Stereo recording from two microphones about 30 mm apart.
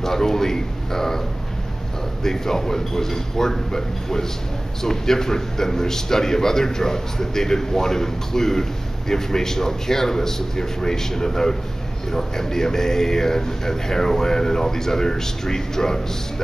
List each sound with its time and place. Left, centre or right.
0.0 s a man's voice: centre
2.2 s speech: centre